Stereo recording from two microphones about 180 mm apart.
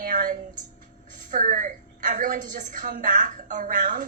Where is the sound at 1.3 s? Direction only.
45° right (ahead or behind).